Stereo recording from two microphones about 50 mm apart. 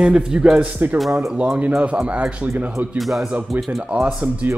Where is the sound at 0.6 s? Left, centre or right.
Right.